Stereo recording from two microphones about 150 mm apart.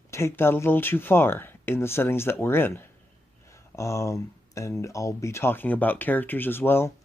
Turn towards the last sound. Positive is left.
turn(degrees=15)  # may be behind; listen again after turning